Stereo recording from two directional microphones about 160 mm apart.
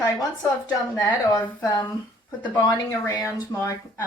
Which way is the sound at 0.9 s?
25° left (ahead or behind).